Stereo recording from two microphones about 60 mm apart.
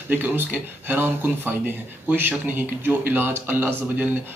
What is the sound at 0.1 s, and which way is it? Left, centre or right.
A man's voice, right.